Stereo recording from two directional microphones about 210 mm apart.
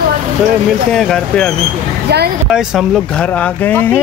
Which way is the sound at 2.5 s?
Centre (ahead or behind).